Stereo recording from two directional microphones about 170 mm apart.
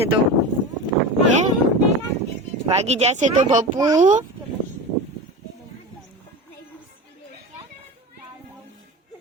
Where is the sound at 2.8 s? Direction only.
40° right (ahead or behind).